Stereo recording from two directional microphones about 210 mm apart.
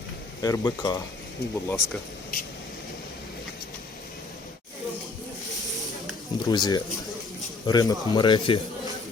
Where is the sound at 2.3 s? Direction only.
45° left (ahead or behind).